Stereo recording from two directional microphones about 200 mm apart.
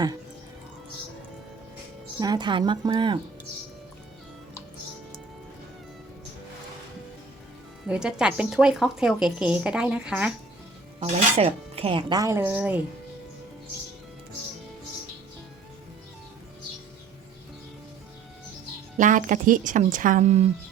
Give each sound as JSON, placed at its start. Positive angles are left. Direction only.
{"t": 2.1, "sound": "speech", "side_deg": -20}
{"t": 7.9, "sound": "speech", "side_deg": -5}
{"t": 11.0, "sound": "speech", "side_deg": -30}
{"t": 18.9, "sound": "speech", "side_deg": -40}